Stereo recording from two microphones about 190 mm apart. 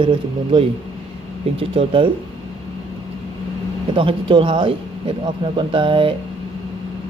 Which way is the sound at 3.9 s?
25° right (ahead or behind).